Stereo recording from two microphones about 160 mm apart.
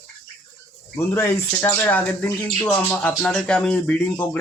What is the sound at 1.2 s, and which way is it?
Speech, 15° left (ahead or behind).